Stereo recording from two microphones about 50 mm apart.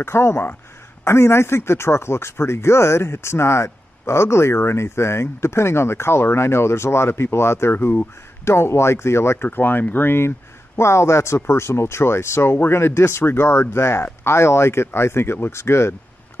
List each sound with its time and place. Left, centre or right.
0.0 s speech: left
7.7 s speech: left
8.5 s speech: left
10.8 s speech: left
15.5 s speech: left